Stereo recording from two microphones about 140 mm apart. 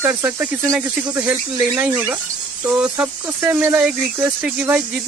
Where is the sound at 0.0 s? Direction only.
15° right (ahead or behind).